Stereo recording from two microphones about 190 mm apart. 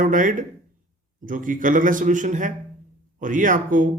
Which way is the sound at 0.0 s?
45° right (ahead or behind).